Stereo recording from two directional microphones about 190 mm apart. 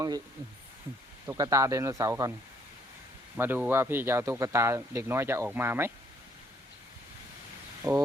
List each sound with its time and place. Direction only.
1.3 s a man's voice: 15° right (ahead or behind)
3.3 s a man's voice: 10° right (ahead or behind)
7.8 s a man's voice: 15° right (ahead or behind)